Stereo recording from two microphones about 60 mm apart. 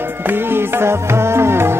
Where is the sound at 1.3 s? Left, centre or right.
Right.